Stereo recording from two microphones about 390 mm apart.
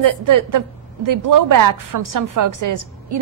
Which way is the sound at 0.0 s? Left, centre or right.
Right.